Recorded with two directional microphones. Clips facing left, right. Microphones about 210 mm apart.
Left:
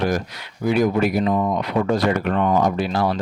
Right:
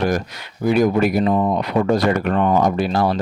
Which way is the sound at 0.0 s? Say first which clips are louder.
Right 2 dB; 45° right (ahead or behind).